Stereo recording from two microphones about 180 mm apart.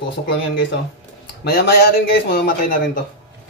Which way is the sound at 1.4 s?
60° left (ahead or behind).